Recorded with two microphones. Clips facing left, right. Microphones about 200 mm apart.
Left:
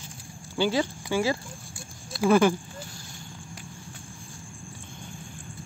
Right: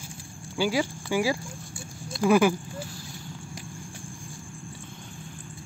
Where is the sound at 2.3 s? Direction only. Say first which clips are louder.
Even; 10° right (ahead or behind).